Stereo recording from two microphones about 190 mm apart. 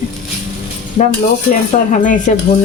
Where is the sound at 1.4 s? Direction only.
45° left (ahead or behind).